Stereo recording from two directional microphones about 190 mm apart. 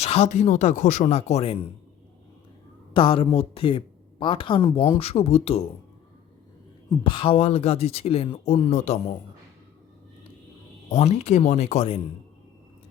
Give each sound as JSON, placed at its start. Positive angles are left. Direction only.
{"t": 0.0, "sound": "speech", "side_deg": 35}
{"t": 2.9, "sound": "speech", "side_deg": 25}
{"t": 7.0, "sound": "speech", "side_deg": 25}
{"t": 10.9, "sound": "speech", "side_deg": 35}